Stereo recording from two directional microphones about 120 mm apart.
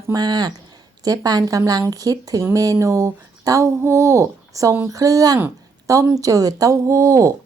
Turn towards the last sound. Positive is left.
turn(degrees=-25)  # may be behind; listen again after turning